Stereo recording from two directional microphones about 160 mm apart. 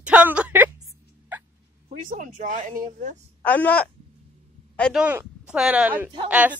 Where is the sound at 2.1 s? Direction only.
55° right (ahead or behind).